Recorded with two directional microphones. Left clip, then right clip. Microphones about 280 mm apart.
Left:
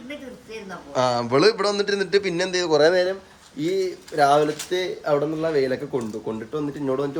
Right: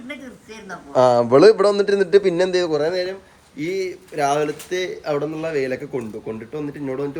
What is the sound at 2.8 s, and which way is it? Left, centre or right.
Speech, left.